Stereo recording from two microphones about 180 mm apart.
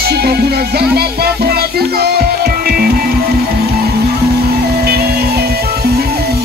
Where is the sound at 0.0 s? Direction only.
60° right (ahead or behind).